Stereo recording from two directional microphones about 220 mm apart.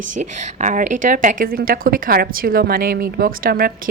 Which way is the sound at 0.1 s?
35° right (ahead or behind).